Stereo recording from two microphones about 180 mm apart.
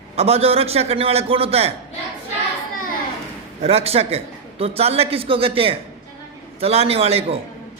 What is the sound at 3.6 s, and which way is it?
A man's voice, 35° right (ahead or behind).